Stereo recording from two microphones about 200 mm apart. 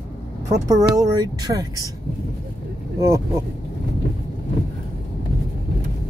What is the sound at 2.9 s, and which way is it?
Speech, 15° right (ahead or behind).